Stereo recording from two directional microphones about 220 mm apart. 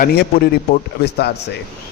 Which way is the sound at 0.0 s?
40° left (ahead or behind).